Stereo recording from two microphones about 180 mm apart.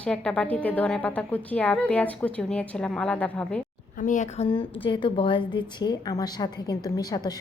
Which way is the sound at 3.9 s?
45° left (ahead or behind).